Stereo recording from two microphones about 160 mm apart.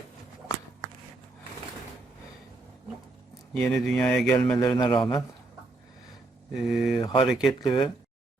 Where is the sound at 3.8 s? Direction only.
Centre (ahead or behind).